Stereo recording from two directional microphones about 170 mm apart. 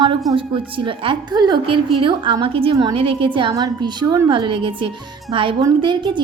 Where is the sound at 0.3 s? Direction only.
30° right (ahead or behind).